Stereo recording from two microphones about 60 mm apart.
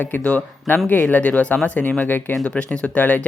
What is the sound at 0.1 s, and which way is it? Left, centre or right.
Speech, left.